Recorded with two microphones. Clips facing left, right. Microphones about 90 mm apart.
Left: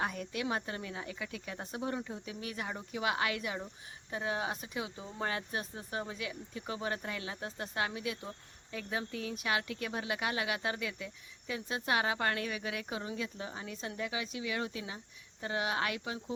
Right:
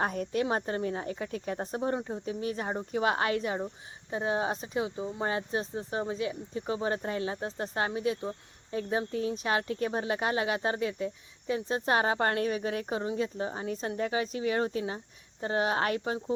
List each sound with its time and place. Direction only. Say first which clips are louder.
0.0 s speech: right 6 dB; 45° right (ahead or behind)